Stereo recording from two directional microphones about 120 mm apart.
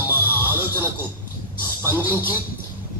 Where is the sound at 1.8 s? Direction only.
15° right (ahead or behind).